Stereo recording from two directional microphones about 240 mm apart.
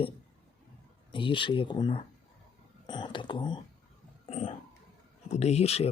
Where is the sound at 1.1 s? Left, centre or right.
Left.